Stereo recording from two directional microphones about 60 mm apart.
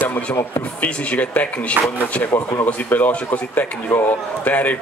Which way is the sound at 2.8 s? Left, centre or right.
Left.